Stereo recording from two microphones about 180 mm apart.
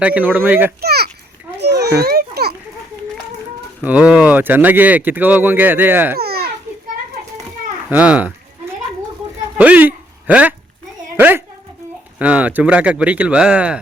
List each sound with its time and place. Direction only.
0.0 s speech: 10° right (ahead or behind)
0.8 s a child's voice: 60° right (ahead or behind)
1.5 s children playing: 70° right (ahead or behind)
3.8 s speech: 5° right (ahead or behind)
6.1 s babbling: 60° right (ahead or behind)
7.9 s a sound: 10° right (ahead or behind)
9.6 s speech: 10° right (ahead or behind)